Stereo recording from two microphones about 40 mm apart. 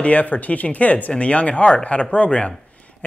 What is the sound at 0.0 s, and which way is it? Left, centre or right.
Speech, left.